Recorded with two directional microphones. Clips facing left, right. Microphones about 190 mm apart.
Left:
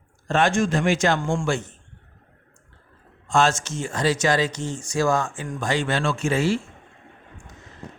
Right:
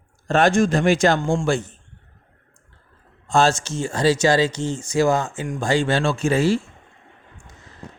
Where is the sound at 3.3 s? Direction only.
35° right (ahead or behind).